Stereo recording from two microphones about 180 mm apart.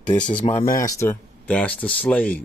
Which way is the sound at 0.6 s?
50° left (ahead or behind).